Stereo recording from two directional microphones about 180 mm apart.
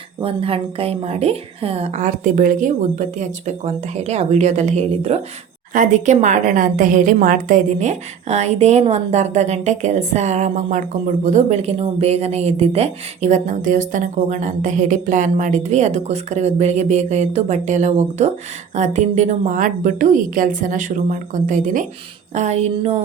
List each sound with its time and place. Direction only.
0.2 s a woman's voice: 30° right (ahead or behind)